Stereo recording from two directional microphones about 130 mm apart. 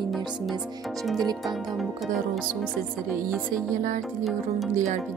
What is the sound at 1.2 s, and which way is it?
Speech, 30° right (ahead or behind).